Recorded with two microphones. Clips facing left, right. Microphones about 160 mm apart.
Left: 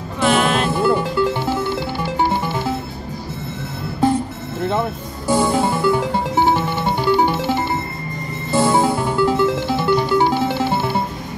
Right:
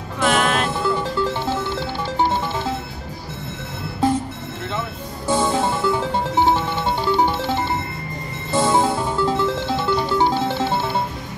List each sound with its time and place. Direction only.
0.2 s music: 5° left (ahead or behind)
5.3 s music: 10° left (ahead or behind)